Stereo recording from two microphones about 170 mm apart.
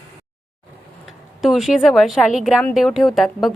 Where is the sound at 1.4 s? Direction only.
Centre (ahead or behind).